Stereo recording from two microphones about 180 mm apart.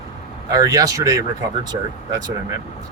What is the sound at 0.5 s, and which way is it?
Speech, 20° right (ahead or behind).